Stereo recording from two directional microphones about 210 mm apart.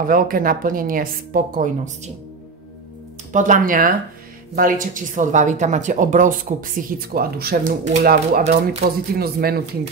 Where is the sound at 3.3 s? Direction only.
35° right (ahead or behind).